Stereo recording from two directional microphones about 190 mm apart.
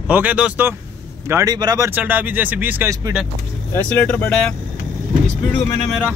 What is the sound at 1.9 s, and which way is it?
Speech, 10° right (ahead or behind).